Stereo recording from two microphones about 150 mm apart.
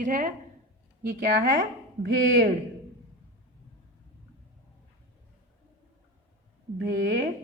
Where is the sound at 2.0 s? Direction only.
90° right.